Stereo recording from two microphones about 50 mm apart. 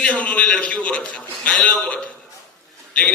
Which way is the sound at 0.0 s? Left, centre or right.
Left.